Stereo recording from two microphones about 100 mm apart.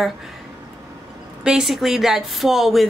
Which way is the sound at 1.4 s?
5° right (ahead or behind).